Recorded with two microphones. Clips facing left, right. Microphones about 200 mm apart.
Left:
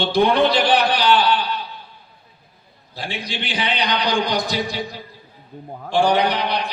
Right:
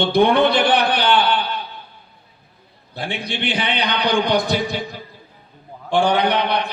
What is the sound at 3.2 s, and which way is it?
A man's voice, 55° right (ahead or behind).